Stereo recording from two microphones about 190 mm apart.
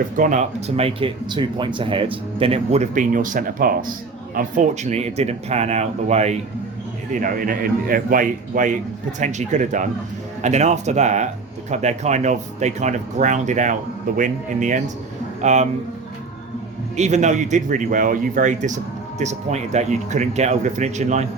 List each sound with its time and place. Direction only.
0.2 s speech: 40° right (ahead or behind)
17.0 s speech: 35° right (ahead or behind)